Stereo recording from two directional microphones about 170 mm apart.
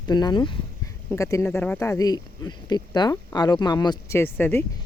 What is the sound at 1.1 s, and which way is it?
Speech, 15° left (ahead or behind).